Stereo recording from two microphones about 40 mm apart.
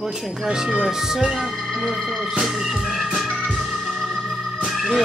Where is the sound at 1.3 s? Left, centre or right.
Centre.